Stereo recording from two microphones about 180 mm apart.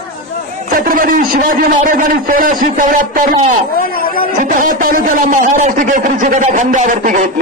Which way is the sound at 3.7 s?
55° left (ahead or behind).